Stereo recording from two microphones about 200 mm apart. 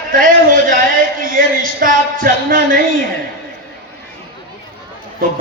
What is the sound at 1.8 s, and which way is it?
A man's voice, 45° right (ahead or behind).